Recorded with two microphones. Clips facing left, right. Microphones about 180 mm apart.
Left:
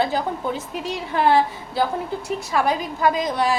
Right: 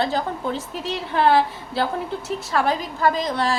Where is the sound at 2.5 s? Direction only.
15° left (ahead or behind).